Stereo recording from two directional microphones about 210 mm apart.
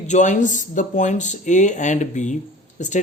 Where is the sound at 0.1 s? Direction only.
35° left (ahead or behind).